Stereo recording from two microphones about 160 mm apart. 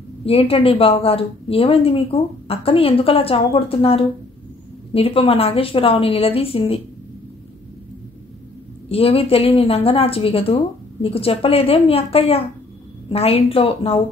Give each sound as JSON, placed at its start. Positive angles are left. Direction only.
{"t": 0.2, "sound": "a woman's voice", "side_deg": 35}
{"t": 8.8, "sound": "a woman's voice", "side_deg": 35}